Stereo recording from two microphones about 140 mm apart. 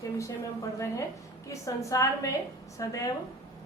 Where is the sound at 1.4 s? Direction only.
25° left (ahead or behind).